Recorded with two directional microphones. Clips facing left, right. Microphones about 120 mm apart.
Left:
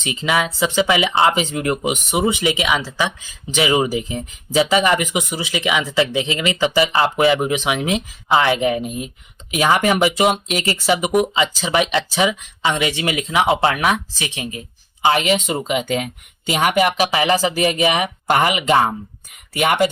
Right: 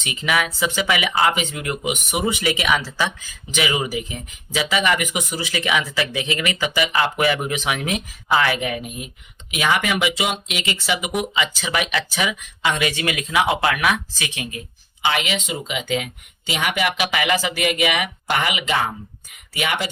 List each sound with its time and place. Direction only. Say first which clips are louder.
0.0 s speech: left 3 dB; 30° left (ahead or behind)
15.0 s speech: left 6 dB; 40° left (ahead or behind)